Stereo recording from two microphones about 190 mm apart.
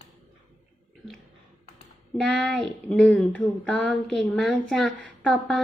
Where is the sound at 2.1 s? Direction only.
5° left (ahead or behind).